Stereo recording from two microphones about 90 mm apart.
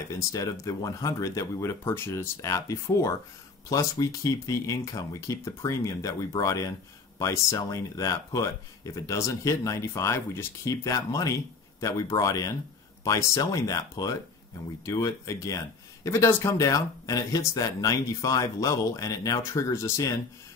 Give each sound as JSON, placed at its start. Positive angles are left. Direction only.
{"t": 0.1, "sound": "speech", "side_deg": 40}